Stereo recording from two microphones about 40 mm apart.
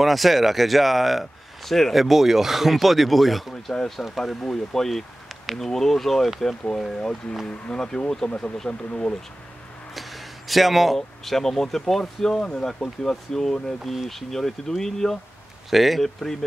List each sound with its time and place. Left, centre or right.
0.0 s speech: centre
7.0 s speech: left
9.9 s a sound: centre
11.2 s speech: centre
13.9 s speech: centre
15.7 s speech: centre